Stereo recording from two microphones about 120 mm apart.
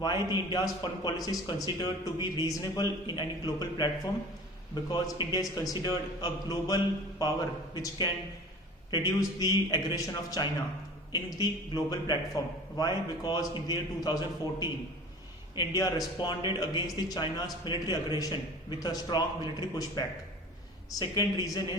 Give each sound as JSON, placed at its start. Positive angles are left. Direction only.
{"t": 0.0, "sound": "a man's voice", "side_deg": 35}
{"t": 11.7, "sound": "a man's voice", "side_deg": 35}